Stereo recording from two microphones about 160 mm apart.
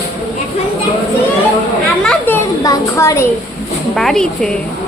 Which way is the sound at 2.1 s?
10° left (ahead or behind).